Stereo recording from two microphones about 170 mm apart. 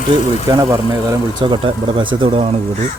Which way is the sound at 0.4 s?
20° right (ahead or behind).